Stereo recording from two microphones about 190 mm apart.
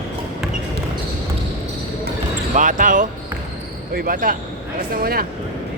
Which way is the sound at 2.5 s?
45° right (ahead or behind).